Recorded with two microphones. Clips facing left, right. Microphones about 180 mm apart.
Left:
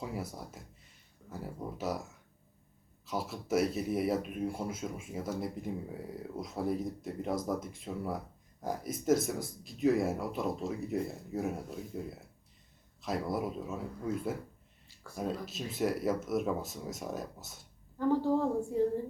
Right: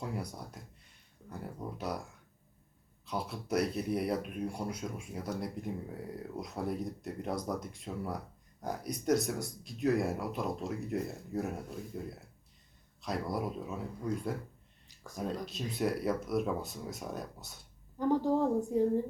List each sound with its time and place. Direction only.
0.0 s speech: 5° left (ahead or behind)
3.1 s speech: centre (ahead or behind)
15.4 s speech: centre (ahead or behind)
17.9 s a woman's voice: 15° right (ahead or behind)